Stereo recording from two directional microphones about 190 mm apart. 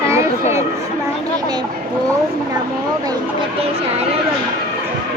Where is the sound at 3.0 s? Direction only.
20° right (ahead or behind).